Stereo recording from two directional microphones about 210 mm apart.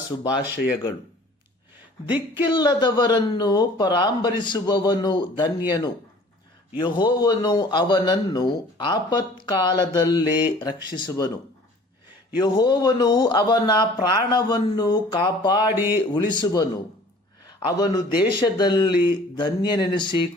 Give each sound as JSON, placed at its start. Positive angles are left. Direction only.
{"t": 0.2, "sound": "a man's voice", "side_deg": 20}
{"t": 2.3, "sound": "a man's voice", "side_deg": 20}
{"t": 6.7, "sound": "a man's voice", "side_deg": 20}
{"t": 12.4, "sound": "a man's voice", "side_deg": 20}
{"t": 15.7, "sound": "speech", "side_deg": -10}
{"t": 16.1, "sound": "a man's voice", "side_deg": 20}